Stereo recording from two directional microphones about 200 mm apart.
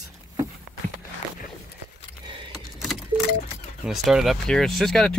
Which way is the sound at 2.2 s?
25° right (ahead or behind).